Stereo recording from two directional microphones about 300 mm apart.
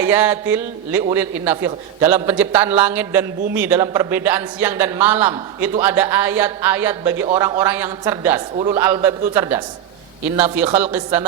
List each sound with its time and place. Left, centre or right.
0.0 s a man's voice: centre